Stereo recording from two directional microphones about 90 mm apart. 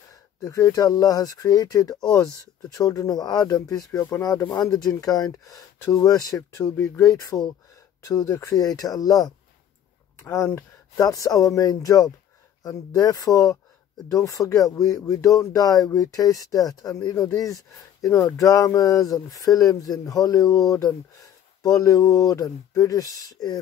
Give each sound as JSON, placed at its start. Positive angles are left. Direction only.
{"t": 0.4, "sound": "speech", "side_deg": 35}
{"t": 6.5, "sound": "speech", "side_deg": 30}
{"t": 8.0, "sound": "speech", "side_deg": 40}
{"t": 8.5, "sound": "speech", "side_deg": 45}
{"t": 10.2, "sound": "speech", "side_deg": 30}
{"t": 11.0, "sound": "speech", "side_deg": 40}
{"t": 18.1, "sound": "speech", "side_deg": 30}